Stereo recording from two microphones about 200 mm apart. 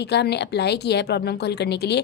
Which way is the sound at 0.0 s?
55° left (ahead or behind).